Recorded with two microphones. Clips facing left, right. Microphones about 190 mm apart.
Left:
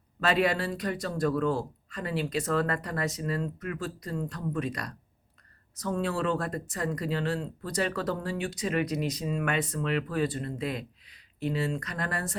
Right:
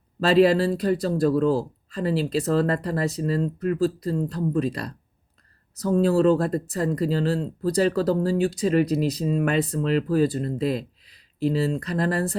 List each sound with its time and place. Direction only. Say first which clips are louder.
0.2 s speech: right 9 dB; 30° right (ahead or behind)